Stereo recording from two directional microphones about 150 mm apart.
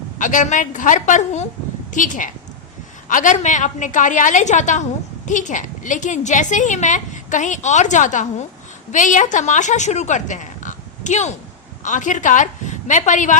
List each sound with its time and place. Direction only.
0.2 s a woman's voice: 60° left (ahead or behind)